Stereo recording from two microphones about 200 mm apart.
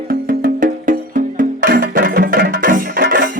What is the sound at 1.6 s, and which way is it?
Music, 45° right (ahead or behind).